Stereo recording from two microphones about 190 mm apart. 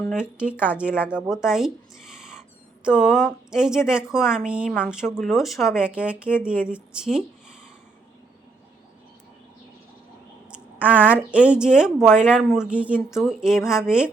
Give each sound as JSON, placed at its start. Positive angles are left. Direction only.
{"t": 0.1, "sound": "speech", "side_deg": -5}
{"t": 2.8, "sound": "speech", "side_deg": -5}
{"t": 10.5, "sound": "a woman's voice", "side_deg": -10}